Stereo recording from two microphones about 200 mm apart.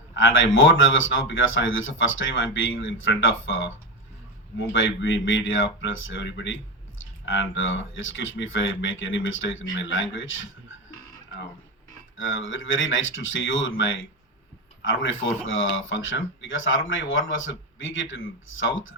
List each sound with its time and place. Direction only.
0.1 s speech: 70° left (ahead or behind)
12.1 s speech: 75° left (ahead or behind)